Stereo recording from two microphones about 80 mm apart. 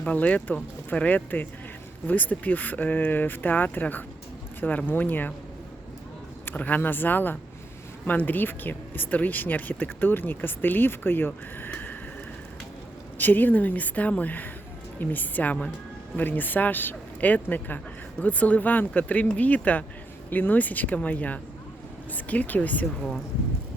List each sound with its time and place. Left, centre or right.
0.0 s speech: centre
6.4 s speech: left
13.1 s speech: left